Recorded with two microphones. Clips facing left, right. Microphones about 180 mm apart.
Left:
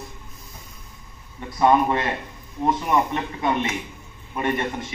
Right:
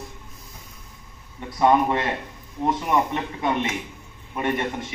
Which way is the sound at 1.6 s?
15° right (ahead or behind).